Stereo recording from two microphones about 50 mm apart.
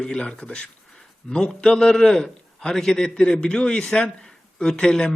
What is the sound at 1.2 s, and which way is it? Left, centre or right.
A man's voice, centre.